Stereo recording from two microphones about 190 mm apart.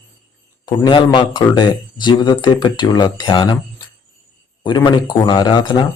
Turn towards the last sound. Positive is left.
turn(degrees=25)  # may be behind; listen again after turning